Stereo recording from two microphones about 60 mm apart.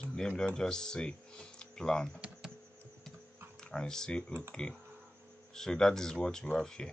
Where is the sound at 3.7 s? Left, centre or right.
Centre.